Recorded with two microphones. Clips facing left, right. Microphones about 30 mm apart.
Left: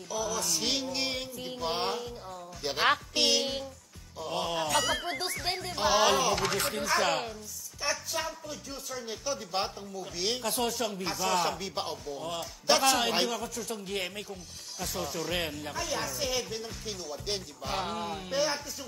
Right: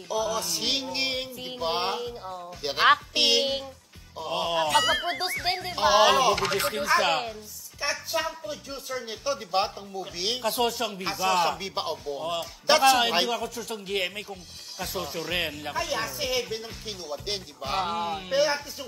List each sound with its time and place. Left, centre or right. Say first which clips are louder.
0.1 s music: right 4 dB; right
4.2 s speech: right 5 dB; right